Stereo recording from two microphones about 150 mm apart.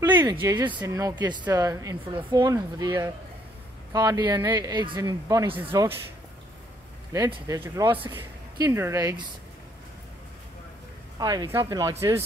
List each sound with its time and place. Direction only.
0.2 s speech: 20° right (ahead or behind)
7.1 s speech: 30° right (ahead or behind)
11.1 s speech: 25° right (ahead or behind)